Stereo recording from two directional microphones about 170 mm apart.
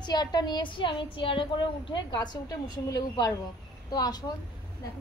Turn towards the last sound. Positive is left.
turn(degrees=25)  # may be behind; listen again after turning